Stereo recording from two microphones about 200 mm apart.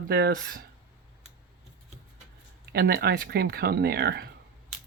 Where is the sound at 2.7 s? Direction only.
50° right (ahead or behind).